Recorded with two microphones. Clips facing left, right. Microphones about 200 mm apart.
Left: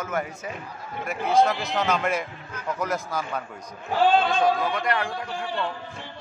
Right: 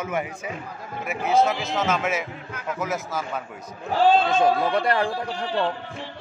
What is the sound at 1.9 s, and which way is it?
Speech, 5° right (ahead or behind).